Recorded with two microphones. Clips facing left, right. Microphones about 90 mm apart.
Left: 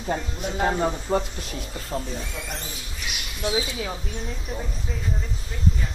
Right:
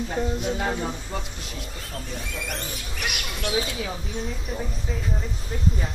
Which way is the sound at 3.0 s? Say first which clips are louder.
Right 1 dB; 60° right (ahead or behind).